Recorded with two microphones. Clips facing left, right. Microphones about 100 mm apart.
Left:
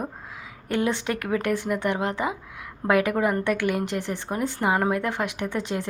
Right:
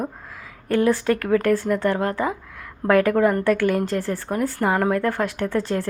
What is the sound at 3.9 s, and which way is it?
A woman's voice, 20° left (ahead or behind).